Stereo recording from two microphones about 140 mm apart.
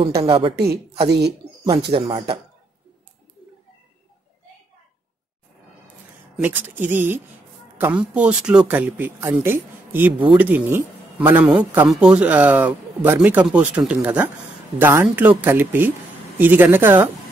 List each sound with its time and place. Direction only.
0.2 s a woman's voice: 35° right (ahead or behind)
6.4 s speech: 15° right (ahead or behind)